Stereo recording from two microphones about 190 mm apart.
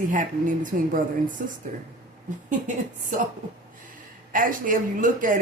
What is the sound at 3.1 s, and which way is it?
Speech, 40° right (ahead or behind).